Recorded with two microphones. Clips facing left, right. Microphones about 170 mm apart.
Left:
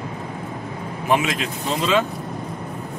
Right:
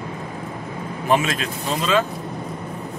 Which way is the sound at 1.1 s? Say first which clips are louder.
Even; 15° left (ahead or behind).